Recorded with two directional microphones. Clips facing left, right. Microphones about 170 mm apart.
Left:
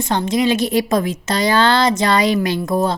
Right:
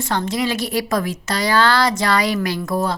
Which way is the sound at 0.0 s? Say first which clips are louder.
Left 4 dB; 20° left (ahead or behind).